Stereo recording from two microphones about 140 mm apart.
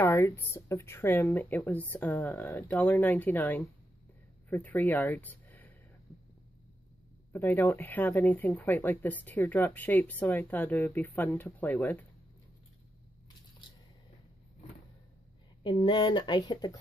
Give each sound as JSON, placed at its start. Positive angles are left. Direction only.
{"t": 0.0, "sound": "speech", "side_deg": 15}
{"t": 7.3, "sound": "speech", "side_deg": 15}
{"t": 15.6, "sound": "speech", "side_deg": 35}